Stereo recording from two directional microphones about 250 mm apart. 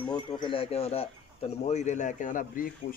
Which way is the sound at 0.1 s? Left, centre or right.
Centre.